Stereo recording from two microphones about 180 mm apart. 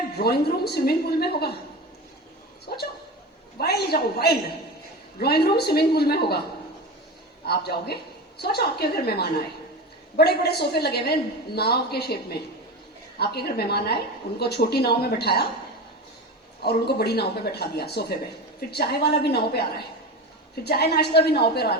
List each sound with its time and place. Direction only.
0.2 s a woman's voice: 60° left (ahead or behind)
3.6 s a woman's voice: 60° left (ahead or behind)
7.4 s a woman's voice: 60° left (ahead or behind)
16.6 s a woman's voice: 65° left (ahead or behind)